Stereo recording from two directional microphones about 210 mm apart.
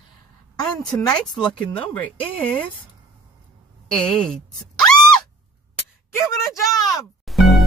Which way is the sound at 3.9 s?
5° left (ahead or behind).